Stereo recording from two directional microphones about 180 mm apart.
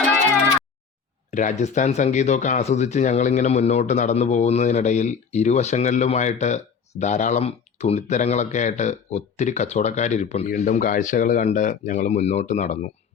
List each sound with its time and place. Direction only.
1.3 s speech: 45° left (ahead or behind)